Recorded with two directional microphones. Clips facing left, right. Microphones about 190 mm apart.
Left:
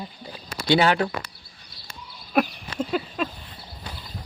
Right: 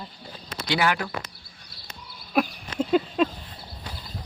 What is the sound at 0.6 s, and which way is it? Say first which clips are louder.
Speech: left 5 dB; 30° left (ahead or behind).